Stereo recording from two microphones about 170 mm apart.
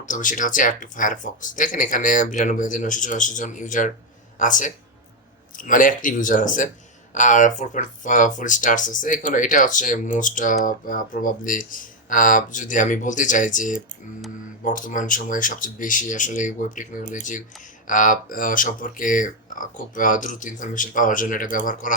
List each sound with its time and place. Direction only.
0.0 s speech: 50° left (ahead or behind)